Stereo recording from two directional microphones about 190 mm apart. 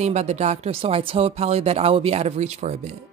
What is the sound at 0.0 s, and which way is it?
A woman's voice, 35° right (ahead or behind).